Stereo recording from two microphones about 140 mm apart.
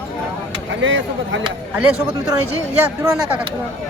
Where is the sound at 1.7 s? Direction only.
10° right (ahead or behind).